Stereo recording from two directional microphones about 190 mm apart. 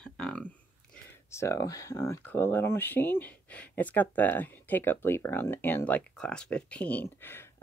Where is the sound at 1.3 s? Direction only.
15° left (ahead or behind).